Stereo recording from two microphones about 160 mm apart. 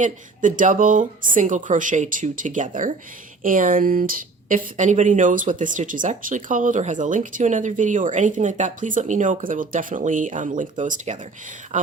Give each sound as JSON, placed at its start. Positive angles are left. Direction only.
{"t": 0.0, "sound": "speech", "side_deg": -55}